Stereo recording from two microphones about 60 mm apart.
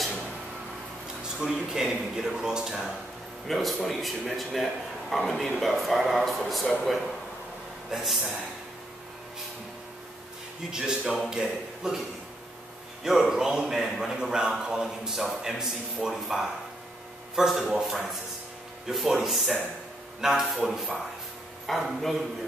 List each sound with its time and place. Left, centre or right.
1.4 s a man's voice: centre
10.7 s a man's voice: centre
13.0 s a man's voice: centre
20.2 s speech: centre